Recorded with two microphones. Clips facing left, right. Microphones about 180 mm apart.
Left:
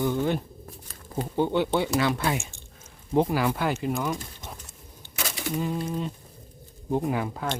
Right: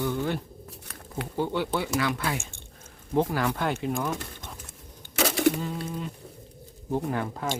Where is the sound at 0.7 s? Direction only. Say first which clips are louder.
Left 3 dB; 75° right (ahead or behind).